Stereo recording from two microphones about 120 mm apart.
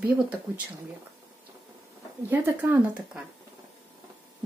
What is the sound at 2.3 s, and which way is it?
Speech, 15° right (ahead or behind).